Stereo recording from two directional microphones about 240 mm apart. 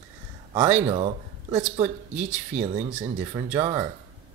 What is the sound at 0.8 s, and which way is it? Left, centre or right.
Speech, right.